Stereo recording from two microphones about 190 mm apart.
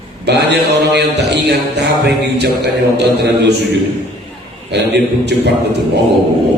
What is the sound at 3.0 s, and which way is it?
Speech, 60° right (ahead or behind).